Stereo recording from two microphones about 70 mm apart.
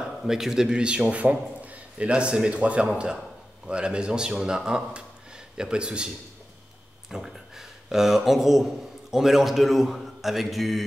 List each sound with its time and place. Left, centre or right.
0.2 s a man's voice: centre